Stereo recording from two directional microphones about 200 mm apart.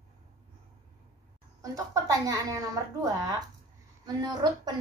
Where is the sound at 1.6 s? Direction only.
15° right (ahead or behind).